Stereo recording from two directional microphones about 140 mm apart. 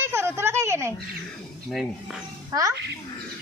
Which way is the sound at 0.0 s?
15° right (ahead or behind).